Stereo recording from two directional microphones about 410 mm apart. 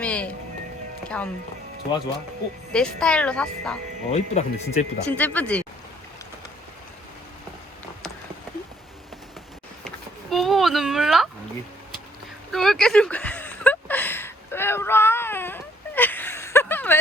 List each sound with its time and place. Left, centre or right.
0.0 s music: centre
1.0 s speech: centre
2.7 s speech: centre
4.1 s speech: centre
5.0 s speech: centre
9.8 s a sound: centre
12.5 s a sound: centre